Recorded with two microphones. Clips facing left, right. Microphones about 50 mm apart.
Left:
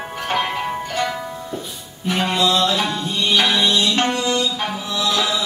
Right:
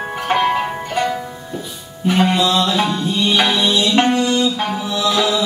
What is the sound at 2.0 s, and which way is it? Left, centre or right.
Music, centre.